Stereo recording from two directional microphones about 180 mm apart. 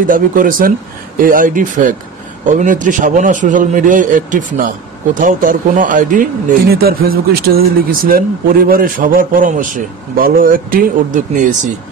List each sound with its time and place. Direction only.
0.0 s speech: 50° right (ahead or behind)